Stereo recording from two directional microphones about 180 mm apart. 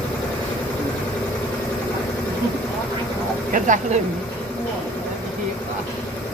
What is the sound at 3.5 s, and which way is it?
Speech, 45° right (ahead or behind).